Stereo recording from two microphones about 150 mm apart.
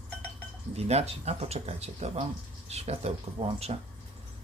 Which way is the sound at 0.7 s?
45° right (ahead or behind).